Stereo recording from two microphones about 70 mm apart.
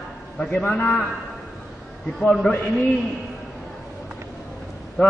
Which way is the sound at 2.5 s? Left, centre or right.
Centre.